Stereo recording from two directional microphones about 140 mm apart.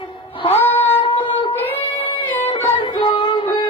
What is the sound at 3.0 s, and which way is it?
Music, 35° left (ahead or behind).